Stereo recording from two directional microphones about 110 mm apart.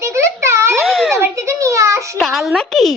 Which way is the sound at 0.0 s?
25° right (ahead or behind).